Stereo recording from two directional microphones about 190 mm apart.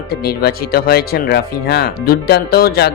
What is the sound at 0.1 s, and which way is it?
Speech, 55° left (ahead or behind).